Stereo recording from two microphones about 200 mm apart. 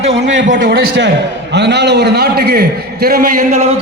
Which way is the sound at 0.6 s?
50° right (ahead or behind).